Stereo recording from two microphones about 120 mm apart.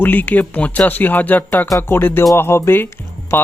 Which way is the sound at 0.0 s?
15° left (ahead or behind).